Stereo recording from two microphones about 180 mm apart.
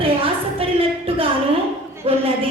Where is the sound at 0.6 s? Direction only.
30° right (ahead or behind).